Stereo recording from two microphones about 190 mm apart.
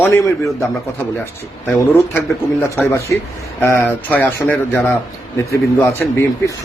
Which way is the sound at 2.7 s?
15° left (ahead or behind).